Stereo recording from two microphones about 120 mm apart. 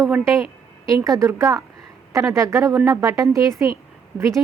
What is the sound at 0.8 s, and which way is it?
A woman's voice, 30° right (ahead or behind).